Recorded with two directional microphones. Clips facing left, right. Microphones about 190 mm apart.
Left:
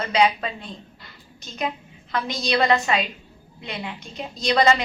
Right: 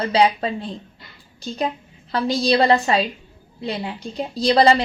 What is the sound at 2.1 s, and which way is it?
A woman's voice, 30° right (ahead or behind).